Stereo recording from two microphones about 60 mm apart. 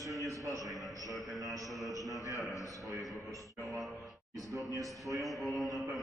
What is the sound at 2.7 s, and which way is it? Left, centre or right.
Speech, right.